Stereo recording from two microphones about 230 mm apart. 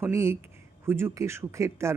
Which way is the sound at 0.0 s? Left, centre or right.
Centre.